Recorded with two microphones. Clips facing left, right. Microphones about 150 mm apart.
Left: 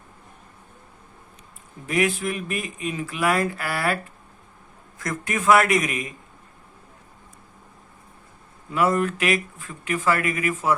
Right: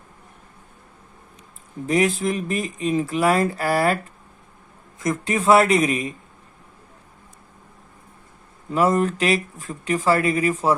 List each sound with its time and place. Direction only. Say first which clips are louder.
1.9 s speech: right 3 dB; 35° right (ahead or behind)
4.9 s speech: right 5 dB; 20° right (ahead or behind)
9.0 s speech: right 2 dB; 35° right (ahead or behind)